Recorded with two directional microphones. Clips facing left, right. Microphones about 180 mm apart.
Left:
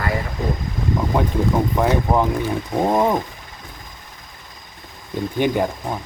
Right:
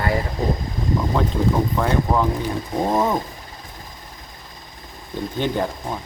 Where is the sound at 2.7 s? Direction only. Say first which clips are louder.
Left 2 dB; 15° left (ahead or behind).